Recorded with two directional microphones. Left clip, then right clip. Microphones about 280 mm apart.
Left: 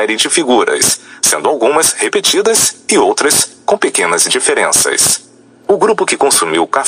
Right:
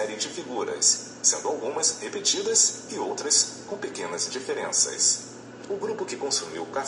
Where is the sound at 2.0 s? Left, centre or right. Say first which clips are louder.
Left 15 dB; left.